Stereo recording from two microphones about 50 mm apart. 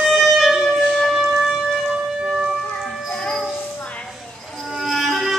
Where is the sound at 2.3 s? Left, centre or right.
Centre.